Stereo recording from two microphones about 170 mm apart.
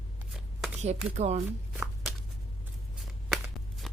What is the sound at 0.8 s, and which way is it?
Speech, 40° right (ahead or behind).